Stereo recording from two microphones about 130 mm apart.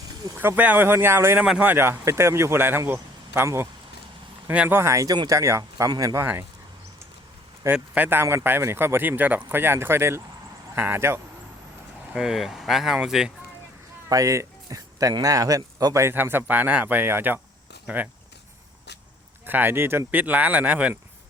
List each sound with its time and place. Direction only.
0.3 s speech: 15° right (ahead or behind)
7.6 s speech: 15° right (ahead or behind)
12.1 s speech: centre (ahead or behind)
14.1 s speech: 25° right (ahead or behind)
19.5 s speech: 15° right (ahead or behind)